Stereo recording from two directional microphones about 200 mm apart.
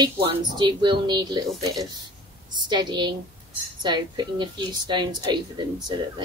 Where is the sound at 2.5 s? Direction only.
20° right (ahead or behind).